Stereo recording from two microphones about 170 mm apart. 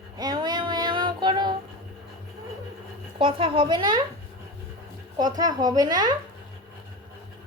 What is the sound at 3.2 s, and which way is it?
Speech, 30° right (ahead or behind).